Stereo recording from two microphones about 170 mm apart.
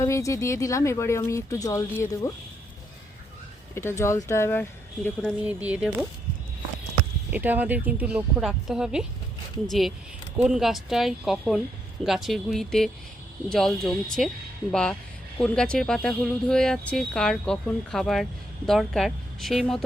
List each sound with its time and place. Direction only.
0.0 s speech: 20° left (ahead or behind)
3.8 s speech: 15° left (ahead or behind)
5.5 s speech: 10° right (ahead or behind)
7.3 s speech: 10° right (ahead or behind)